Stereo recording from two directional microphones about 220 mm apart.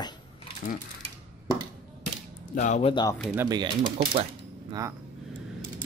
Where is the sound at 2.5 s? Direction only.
35° left (ahead or behind).